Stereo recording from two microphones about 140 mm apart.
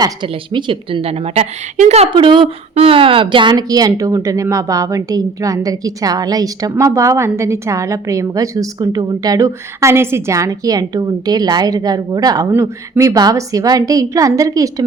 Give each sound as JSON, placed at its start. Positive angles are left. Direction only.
{"t": 0.0, "sound": "a woman's voice", "side_deg": -35}
{"t": 2.0, "sound": "speech", "side_deg": -35}
{"t": 12.5, "sound": "speech", "side_deg": -15}